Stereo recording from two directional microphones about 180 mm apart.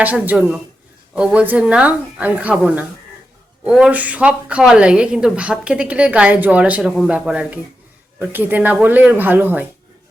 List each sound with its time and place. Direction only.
0.0 s a woman's voice: 10° right (ahead or behind)